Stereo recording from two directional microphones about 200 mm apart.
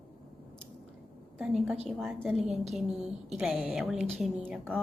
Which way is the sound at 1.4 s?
Centre (ahead or behind).